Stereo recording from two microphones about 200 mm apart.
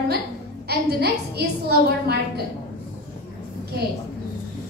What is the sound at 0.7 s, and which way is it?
A woman's voice, 55° right (ahead or behind).